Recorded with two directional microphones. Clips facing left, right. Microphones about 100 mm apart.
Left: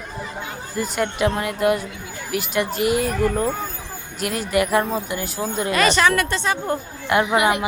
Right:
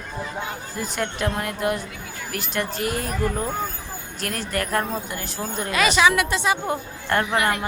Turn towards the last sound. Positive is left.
turn(degrees=10)  # may be behind; listen again after turning